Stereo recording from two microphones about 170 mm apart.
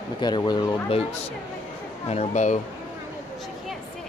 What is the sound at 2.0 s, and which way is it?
Speech, 40° left (ahead or behind).